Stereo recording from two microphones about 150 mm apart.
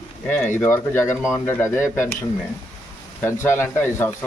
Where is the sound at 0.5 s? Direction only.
15° left (ahead or behind).